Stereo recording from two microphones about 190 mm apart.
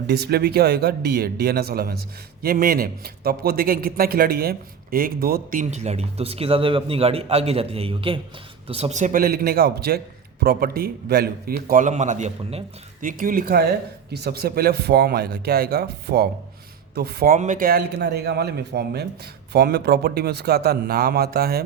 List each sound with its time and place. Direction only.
0.1 s a man's voice: 55° right (ahead or behind)